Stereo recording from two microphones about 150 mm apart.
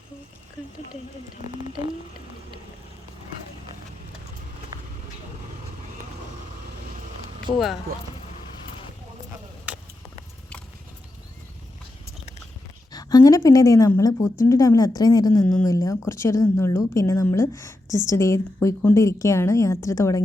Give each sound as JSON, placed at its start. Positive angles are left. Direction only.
{"t": 7.5, "sound": "speech", "side_deg": 35}
{"t": 9.7, "sound": "a sound", "side_deg": -10}
{"t": 12.9, "sound": "speech", "side_deg": 25}